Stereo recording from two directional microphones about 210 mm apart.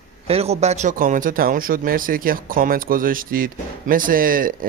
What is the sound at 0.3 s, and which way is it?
Speech, 30° right (ahead or behind).